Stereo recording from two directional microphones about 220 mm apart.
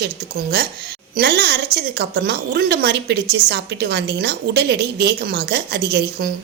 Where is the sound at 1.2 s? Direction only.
50° right (ahead or behind).